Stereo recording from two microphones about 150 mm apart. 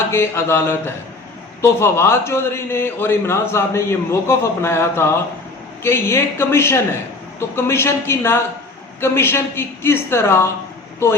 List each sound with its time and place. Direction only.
0.1 s a man's voice: 15° left (ahead or behind)